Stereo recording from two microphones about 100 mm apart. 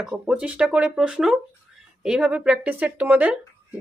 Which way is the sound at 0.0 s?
10° right (ahead or behind).